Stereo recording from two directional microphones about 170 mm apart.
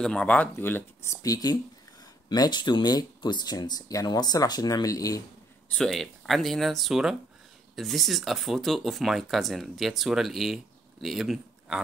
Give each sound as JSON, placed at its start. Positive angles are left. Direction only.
{"t": 0.0, "sound": "speech", "side_deg": 5}
{"t": 5.7, "sound": "speech", "side_deg": 5}